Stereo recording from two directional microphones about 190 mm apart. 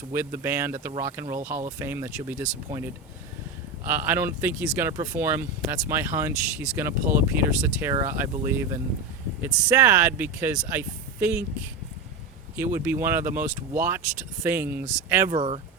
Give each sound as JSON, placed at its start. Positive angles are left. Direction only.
{"t": 0.1, "sound": "speech", "side_deg": -15}
{"t": 1.4, "sound": "speech", "side_deg": -40}
{"t": 1.6, "sound": "speech", "side_deg": -15}
{"t": 12.5, "sound": "speech", "side_deg": -10}
{"t": 15.3, "sound": "speech", "side_deg": -30}